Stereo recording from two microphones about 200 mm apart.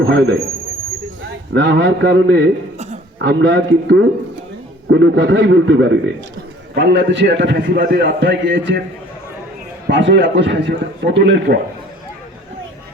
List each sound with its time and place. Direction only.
0.0 s a man's voice: 65° right (ahead or behind)
1.5 s a man's voice: 60° right (ahead or behind)
2.7 s a sound: 35° right (ahead or behind)
3.2 s a man's voice: 65° right (ahead or behind)